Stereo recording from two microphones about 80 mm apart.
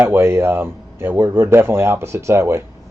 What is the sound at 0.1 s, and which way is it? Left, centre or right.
Speech, right.